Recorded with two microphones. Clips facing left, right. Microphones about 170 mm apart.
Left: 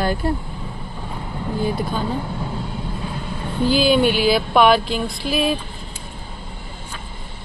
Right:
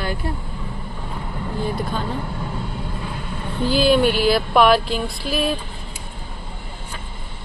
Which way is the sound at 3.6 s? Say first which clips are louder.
Even; centre (ahead or behind).